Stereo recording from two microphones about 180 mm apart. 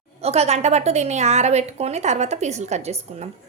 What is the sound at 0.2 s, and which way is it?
A woman's voice, 35° right (ahead or behind).